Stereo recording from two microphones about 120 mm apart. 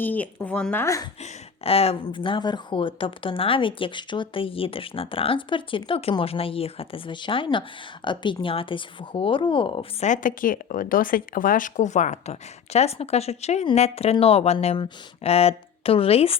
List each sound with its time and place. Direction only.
0.0 s speech: 15° left (ahead or behind)
1.2 s speech: 55° left (ahead or behind)
10.0 s a woman's voice: 90° left
11.5 s speech: 90° left; by 16.4 s 55° left (ahead or behind)